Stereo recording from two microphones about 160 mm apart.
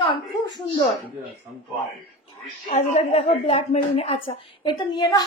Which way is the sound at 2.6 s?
45° left (ahead or behind).